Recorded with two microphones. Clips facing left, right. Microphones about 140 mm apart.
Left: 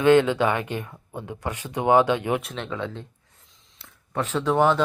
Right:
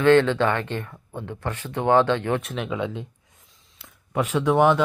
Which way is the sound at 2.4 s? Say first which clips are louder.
Right 3 dB; centre (ahead or behind).